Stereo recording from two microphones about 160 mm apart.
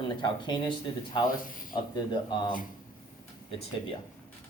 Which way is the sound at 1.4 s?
60° left (ahead or behind).